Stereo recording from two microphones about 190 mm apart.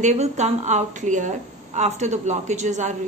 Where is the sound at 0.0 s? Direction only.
35° right (ahead or behind).